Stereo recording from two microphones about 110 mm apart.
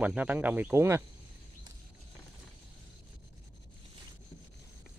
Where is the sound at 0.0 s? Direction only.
10° right (ahead or behind).